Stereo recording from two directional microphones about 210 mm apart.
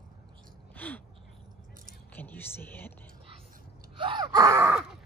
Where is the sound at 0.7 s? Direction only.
10° left (ahead or behind).